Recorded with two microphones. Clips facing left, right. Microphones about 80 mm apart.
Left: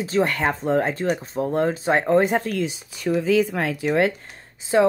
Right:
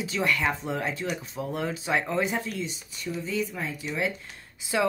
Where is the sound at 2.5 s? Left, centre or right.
Left.